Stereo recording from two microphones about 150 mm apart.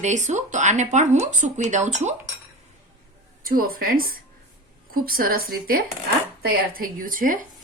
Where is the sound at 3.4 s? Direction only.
75° right (ahead or behind).